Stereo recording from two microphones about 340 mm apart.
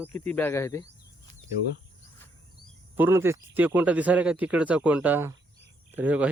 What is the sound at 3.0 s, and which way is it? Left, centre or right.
Speech, centre.